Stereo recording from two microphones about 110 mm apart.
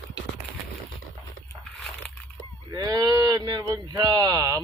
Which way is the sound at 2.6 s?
35° right (ahead or behind).